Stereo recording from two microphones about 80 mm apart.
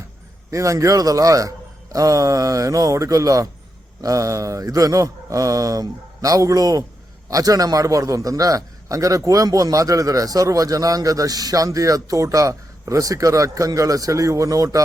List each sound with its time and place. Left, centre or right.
0.5 s a man's voice: right